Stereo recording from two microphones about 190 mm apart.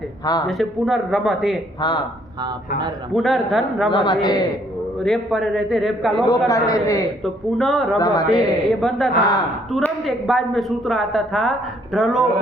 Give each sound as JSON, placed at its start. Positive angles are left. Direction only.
{"t": 0.4, "sound": "speech", "side_deg": 0}
{"t": 1.8, "sound": "speech", "side_deg": 25}
{"t": 3.1, "sound": "speech", "side_deg": 0}
{"t": 3.9, "sound": "speech", "side_deg": 25}
{"t": 5.0, "sound": "speech", "side_deg": 0}
{"t": 6.5, "sound": "a man's voice", "side_deg": 15}
{"t": 7.6, "sound": "speech", "side_deg": 0}
{"t": 7.9, "sound": "speech", "side_deg": 20}
{"t": 8.3, "sound": "speech", "side_deg": 0}